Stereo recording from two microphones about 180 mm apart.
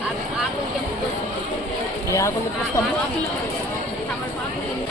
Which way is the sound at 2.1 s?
15° left (ahead or behind).